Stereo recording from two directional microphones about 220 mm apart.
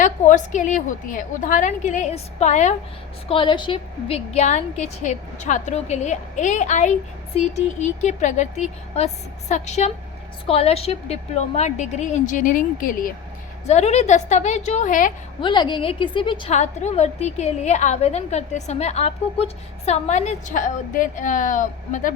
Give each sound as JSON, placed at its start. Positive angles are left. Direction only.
{"t": 0.0, "sound": "a woman's voice", "side_deg": 35}
{"t": 15.4, "sound": "a woman's voice", "side_deg": 20}